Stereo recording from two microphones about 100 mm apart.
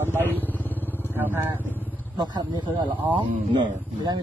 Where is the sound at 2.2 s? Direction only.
45° right (ahead or behind).